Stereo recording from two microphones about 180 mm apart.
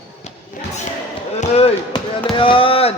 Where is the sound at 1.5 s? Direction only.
30° left (ahead or behind).